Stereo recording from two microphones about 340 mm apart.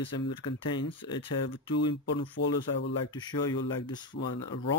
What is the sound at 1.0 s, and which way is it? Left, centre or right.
Speech, centre.